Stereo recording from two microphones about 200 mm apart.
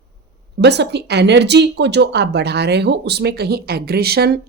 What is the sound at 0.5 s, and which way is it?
Speech, 55° right (ahead or behind).